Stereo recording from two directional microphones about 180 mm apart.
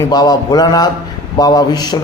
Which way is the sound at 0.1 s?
20° left (ahead or behind).